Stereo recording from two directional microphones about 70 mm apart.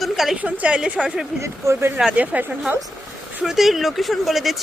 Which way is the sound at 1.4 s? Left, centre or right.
Right.